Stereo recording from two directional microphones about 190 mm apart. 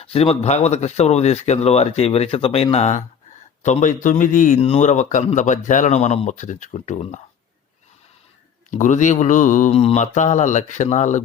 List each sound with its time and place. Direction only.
0.0 s speech: 30° left (ahead or behind)
8.7 s speech: 40° left (ahead or behind)